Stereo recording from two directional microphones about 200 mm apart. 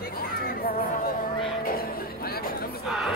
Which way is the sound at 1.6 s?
50° left (ahead or behind).